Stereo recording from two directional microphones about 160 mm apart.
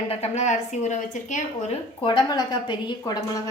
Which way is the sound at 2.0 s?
30° left (ahead or behind).